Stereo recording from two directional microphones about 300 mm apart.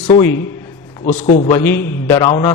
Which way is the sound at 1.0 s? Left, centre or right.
Left.